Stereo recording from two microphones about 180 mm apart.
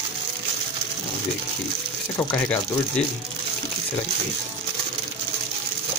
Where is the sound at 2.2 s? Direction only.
10° left (ahead or behind).